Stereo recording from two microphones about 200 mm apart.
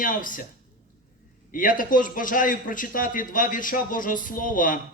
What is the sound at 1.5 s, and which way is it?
A man's voice, 40° left (ahead or behind).